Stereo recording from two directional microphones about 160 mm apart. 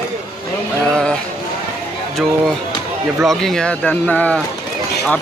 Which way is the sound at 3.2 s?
5° left (ahead or behind).